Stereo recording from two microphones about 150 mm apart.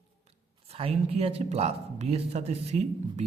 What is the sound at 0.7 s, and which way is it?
A man's voice, 45° right (ahead or behind).